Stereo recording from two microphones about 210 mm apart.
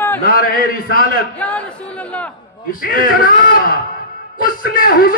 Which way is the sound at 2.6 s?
45° left (ahead or behind).